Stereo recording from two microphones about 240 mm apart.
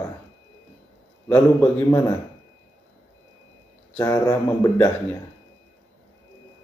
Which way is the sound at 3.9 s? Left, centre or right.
Centre.